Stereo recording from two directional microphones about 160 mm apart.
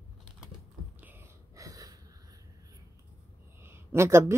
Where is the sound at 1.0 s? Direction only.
15° right (ahead or behind).